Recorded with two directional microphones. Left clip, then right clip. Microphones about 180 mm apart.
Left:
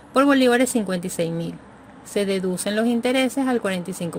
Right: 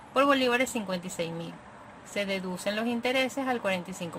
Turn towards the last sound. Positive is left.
turn(degrees=30)  # may be behind; listen again after turning